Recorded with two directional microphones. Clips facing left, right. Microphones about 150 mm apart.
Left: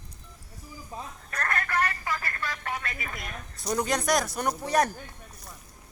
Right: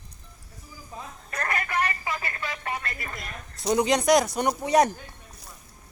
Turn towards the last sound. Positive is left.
turn(degrees=-15)  # may be behind; listen again after turning